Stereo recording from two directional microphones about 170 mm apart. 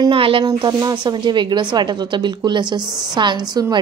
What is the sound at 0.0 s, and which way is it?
A woman's voice, 30° right (ahead or behind).